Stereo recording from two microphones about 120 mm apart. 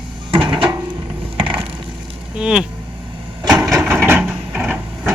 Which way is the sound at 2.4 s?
5° right (ahead or behind).